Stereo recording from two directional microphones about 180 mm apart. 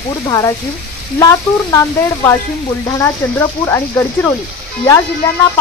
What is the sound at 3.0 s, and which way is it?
Speech, 15° left (ahead or behind).